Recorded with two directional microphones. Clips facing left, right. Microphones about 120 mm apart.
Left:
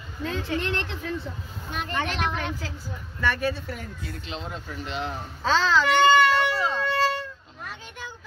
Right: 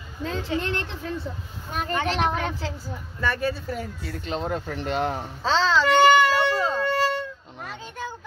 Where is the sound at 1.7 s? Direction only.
40° right (ahead or behind).